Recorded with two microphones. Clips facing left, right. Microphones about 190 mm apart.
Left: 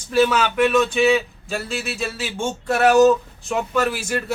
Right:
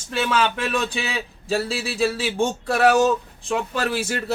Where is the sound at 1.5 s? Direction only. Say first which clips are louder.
Right 5 dB; 35° right (ahead or behind).